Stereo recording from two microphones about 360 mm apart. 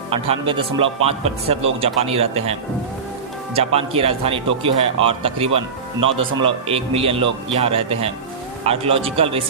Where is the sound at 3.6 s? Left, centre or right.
Centre.